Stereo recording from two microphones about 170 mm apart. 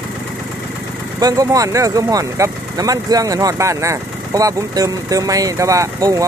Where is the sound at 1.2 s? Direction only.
20° right (ahead or behind).